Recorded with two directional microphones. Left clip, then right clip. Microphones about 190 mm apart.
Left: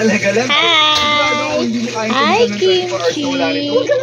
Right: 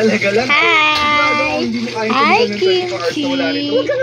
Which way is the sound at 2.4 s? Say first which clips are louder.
Left 1 dB; 65° right (ahead or behind).